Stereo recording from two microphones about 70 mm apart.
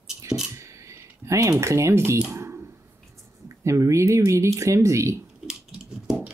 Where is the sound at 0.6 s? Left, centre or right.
Right.